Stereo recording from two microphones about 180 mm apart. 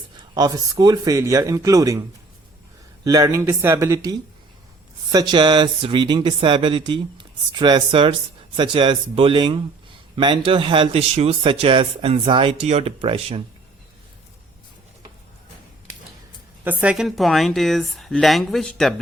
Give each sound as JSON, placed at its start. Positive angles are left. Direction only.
{"t": 0.3, "sound": "speech", "side_deg": -20}
{"t": 16.6, "sound": "speech", "side_deg": -5}